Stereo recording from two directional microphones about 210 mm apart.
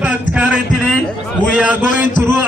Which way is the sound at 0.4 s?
5° right (ahead or behind).